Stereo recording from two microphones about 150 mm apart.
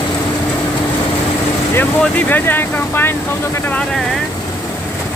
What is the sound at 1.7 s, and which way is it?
Speech, 15° left (ahead or behind).